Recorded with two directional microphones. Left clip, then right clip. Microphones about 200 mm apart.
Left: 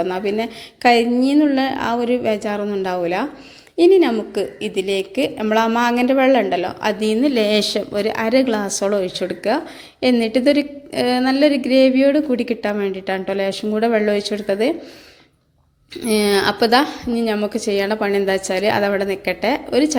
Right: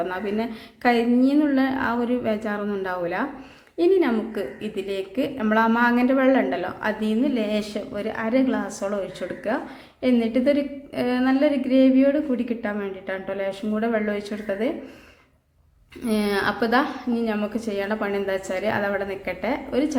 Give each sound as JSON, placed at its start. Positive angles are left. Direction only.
{"t": 0.0, "sound": "a woman's voice", "side_deg": 20}
{"t": 16.0, "sound": "a woman's voice", "side_deg": 25}